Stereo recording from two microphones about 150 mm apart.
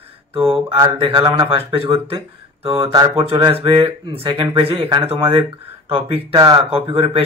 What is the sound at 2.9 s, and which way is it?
Speech, 30° right (ahead or behind).